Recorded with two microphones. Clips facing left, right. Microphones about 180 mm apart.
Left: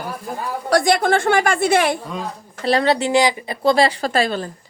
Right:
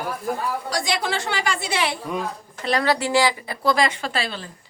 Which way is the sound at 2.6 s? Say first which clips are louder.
Left 4 dB; 30° left (ahead or behind).